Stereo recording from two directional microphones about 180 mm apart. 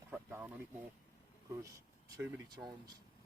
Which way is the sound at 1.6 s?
20° right (ahead or behind).